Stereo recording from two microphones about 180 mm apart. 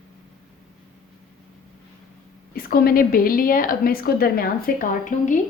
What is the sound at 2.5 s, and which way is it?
A woman's voice, 55° left (ahead or behind).